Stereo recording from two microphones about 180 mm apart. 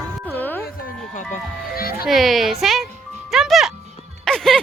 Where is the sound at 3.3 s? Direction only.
Centre (ahead or behind).